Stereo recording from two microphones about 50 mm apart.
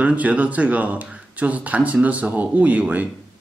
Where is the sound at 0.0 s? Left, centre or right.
Right.